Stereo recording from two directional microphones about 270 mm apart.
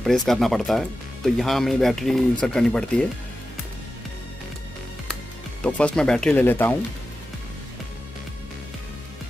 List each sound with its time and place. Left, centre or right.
0.0 s speech: centre
5.6 s speech: centre